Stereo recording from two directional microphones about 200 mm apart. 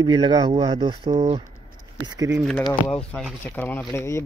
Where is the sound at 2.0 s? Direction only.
20° right (ahead or behind).